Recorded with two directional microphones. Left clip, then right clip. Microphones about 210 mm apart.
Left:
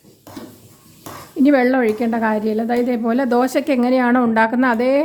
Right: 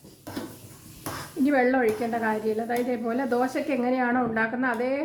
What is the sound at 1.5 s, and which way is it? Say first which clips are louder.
A woman's voice: left 7 dB; 50° left (ahead or behind).